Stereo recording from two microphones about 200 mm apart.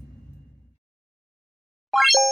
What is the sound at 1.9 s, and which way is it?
Plop, centre (ahead or behind).